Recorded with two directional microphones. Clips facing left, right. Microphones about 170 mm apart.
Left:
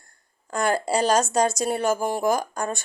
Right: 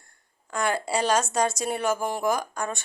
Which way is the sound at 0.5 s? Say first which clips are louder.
Left 3 dB; 40° left (ahead or behind).